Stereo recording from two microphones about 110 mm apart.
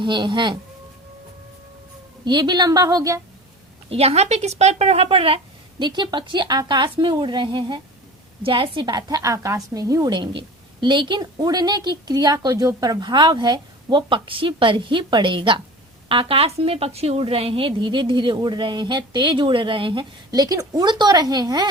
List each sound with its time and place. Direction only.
0.0 s a woman's voice: 45° right (ahead or behind)
2.2 s a woman's voice: 45° right (ahead or behind)
3.8 s speech: 70° right (ahead or behind)
5.8 s a woman's voice: 45° right (ahead or behind)